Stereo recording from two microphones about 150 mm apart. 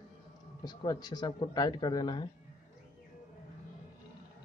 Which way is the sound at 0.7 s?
25° left (ahead or behind).